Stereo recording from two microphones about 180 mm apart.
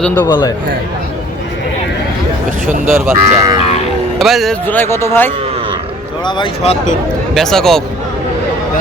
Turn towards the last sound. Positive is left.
turn(degrees=5)  # may be behind; listen again after turning